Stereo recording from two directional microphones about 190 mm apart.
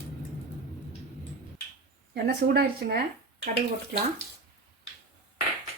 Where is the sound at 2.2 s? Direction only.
55° right (ahead or behind).